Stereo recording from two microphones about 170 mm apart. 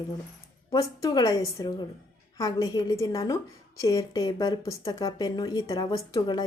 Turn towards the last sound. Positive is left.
turn(degrees=20)  # may be behind; listen again after turning